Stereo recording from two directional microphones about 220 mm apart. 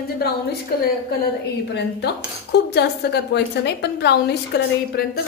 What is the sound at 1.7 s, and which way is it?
Cutlery, 50° left (ahead or behind).